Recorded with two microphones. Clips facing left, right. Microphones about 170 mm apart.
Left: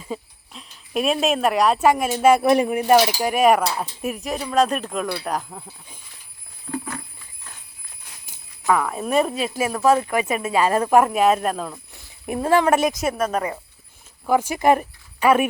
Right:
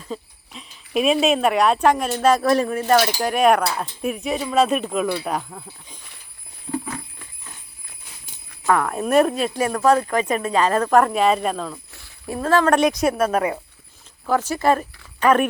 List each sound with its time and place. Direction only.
0.0 s speech: 5° left (ahead or behind)
8.6 s speech: 5° left (ahead or behind)
14.3 s speech: 10° left (ahead or behind)